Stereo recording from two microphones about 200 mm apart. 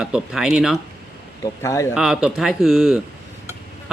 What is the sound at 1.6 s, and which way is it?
Speech, 15° left (ahead or behind).